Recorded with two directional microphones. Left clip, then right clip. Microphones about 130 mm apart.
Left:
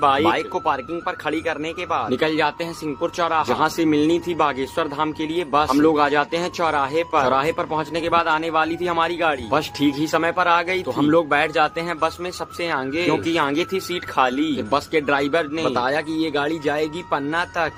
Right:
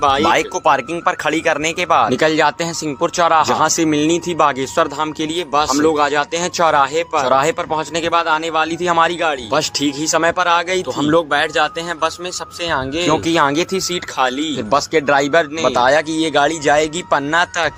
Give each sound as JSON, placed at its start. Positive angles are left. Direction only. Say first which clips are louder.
{"t": 0.0, "sound": "speech", "louder": "right 4 dB", "side_deg": -55}
{"t": 13.2, "sound": "speech", "louder": "right 6 dB", "side_deg": -60}